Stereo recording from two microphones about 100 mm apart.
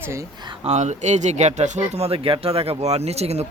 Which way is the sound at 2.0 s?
75° right (ahead or behind).